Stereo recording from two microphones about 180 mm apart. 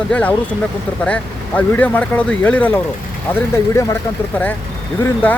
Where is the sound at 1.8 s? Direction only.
10° left (ahead or behind).